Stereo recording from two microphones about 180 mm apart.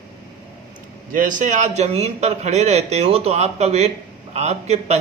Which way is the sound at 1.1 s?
45° right (ahead or behind).